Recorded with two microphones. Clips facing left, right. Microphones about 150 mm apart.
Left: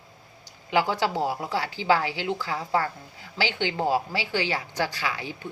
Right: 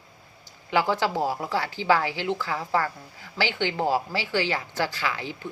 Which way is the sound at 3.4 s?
15° left (ahead or behind).